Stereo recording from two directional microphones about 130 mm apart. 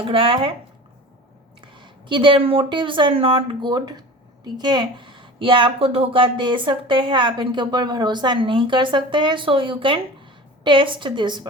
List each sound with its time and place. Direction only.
0.1 s speech: 45° right (ahead or behind)
1.6 s a woman's voice: 40° right (ahead or behind)